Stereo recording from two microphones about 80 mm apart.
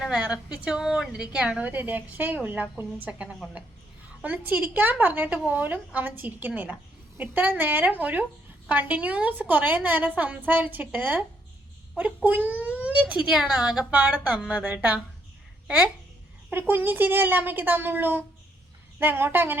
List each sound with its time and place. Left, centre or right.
0.0 s a woman's voice: centre
16.5 s a woman's voice: right